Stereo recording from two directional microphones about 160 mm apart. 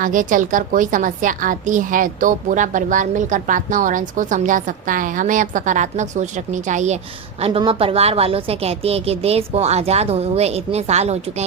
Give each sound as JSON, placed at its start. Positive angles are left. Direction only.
{"t": 0.0, "sound": "a woman's voice", "side_deg": -55}
{"t": 7.4, "sound": "a woman's voice", "side_deg": -35}